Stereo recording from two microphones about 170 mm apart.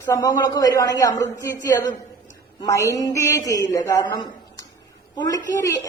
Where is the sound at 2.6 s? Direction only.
20° left (ahead or behind).